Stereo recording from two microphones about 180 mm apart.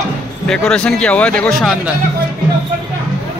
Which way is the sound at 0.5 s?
5° left (ahead or behind).